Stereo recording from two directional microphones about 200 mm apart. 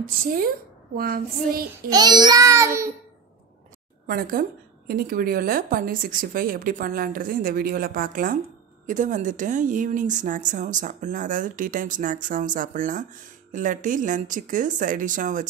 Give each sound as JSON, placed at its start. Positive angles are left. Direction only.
{"t": 0.9, "sound": "a woman's voice", "side_deg": -45}
{"t": 1.9, "sound": "a child's voice", "side_deg": -20}
{"t": 4.1, "sound": "a woman's voice", "side_deg": -45}